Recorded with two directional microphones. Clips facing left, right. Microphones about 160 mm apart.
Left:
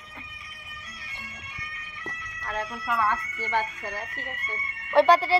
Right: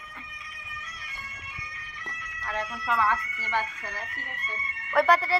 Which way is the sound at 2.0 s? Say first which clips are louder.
Left 1 dB; 20° left (ahead or behind).